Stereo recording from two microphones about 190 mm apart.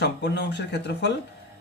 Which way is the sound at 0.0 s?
65° left (ahead or behind).